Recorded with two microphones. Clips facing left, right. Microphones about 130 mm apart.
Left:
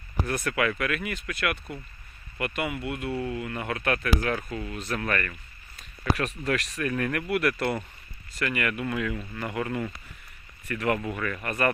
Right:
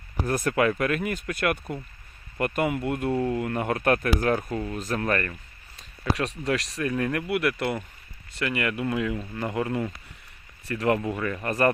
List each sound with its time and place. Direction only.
0.3 s speech: 40° right (ahead or behind); by 11.5 s 25° right (ahead or behind)